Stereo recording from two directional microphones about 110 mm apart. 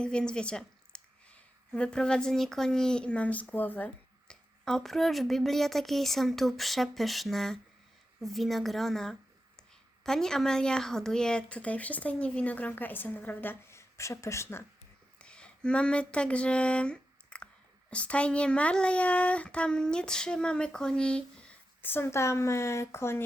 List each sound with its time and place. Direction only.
0.0 s a woman's voice: 10° left (ahead or behind); by 14.6 s 25° left (ahead or behind)
15.2 s a sound: 10° left (ahead or behind)
17.9 s a woman's voice: 10° left (ahead or behind)
21.8 s speech: 20° left (ahead or behind)